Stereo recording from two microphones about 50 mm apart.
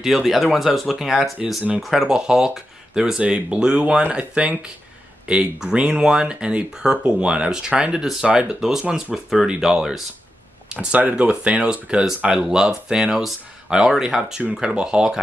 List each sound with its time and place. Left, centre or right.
0.0 s speech: centre
2.0 s speech: centre
8.3 s speech: right
8.5 s speech: centre